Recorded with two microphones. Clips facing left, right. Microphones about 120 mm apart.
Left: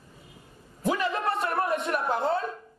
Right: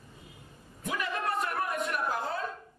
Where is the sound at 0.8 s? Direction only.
30° left (ahead or behind).